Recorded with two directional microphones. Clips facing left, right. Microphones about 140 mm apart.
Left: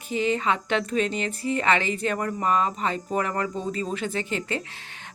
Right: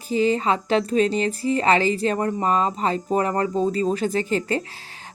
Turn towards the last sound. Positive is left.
turn(degrees=-40)  # may be behind; listen again after turning